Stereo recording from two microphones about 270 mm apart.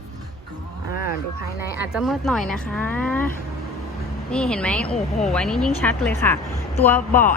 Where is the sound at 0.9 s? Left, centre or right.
Left.